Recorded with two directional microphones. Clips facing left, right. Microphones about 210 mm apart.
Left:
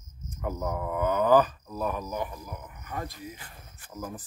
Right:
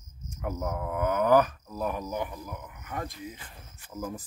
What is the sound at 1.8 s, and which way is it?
Speech, 15° right (ahead or behind).